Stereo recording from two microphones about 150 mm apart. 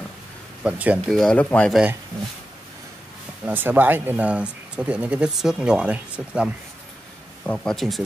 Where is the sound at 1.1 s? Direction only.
5° left (ahead or behind).